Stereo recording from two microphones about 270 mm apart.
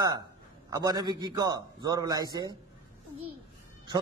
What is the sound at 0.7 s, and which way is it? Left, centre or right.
A man's voice, centre.